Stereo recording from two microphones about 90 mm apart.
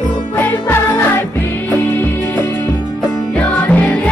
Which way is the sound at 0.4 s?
25° left (ahead or behind).